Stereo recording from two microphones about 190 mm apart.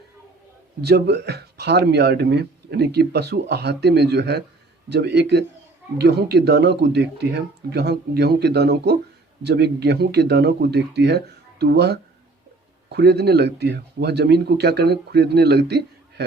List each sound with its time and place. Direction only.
0.9 s a man's voice: 60° right (ahead or behind)